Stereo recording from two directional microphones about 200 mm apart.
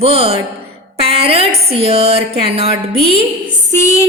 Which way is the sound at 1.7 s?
30° right (ahead or behind).